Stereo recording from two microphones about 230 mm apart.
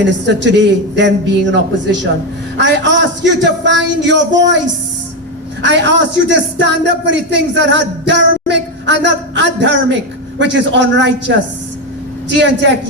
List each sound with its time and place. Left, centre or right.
0.0 s speech: right
5.6 s speech: right
12.3 s speech: right